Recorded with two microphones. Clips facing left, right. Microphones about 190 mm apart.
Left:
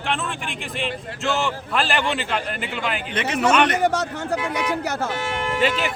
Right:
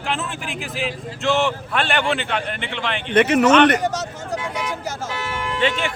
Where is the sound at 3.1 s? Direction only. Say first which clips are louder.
Right 8 dB; 60° right (ahead or behind).